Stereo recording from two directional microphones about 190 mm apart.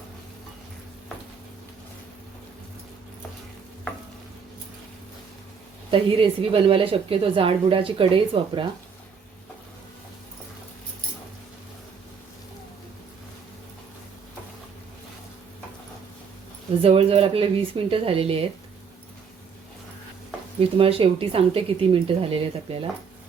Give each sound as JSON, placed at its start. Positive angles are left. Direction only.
{"t": 5.9, "sound": "a woman's voice", "side_deg": -30}
{"t": 16.8, "sound": "a woman's voice", "side_deg": -30}
{"t": 20.6, "sound": "a woman's voice", "side_deg": -30}